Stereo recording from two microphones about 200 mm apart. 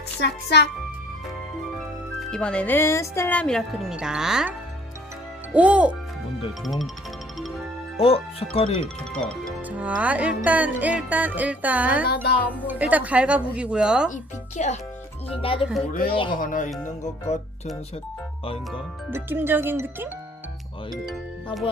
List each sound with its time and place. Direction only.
0.2 s a child's voice: 55° left (ahead or behind)
2.3 s speech: 5° left (ahead or behind)
7.9 s speech: 30° left (ahead or behind)
9.4 s music: 10° right (ahead or behind)
12.0 s a child's voice: 55° left (ahead or behind)
12.5 s music: 5° right (ahead or behind)
14.1 s speech: 35° left (ahead or behind)
16.4 s speech: 40° left (ahead or behind)
19.1 s music: 10° right (ahead or behind)
21.0 s music: centre (ahead or behind)